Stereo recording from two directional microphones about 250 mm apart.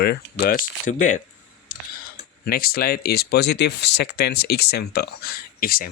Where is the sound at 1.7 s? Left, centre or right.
Left.